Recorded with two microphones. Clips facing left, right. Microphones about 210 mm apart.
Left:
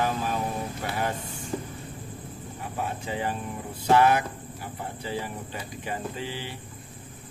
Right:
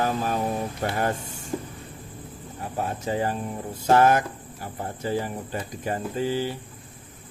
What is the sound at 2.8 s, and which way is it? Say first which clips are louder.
Speech: right 5 dB; 40° right (ahead or behind).